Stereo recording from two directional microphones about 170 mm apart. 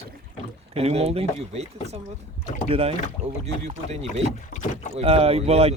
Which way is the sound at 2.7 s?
35° right (ahead or behind).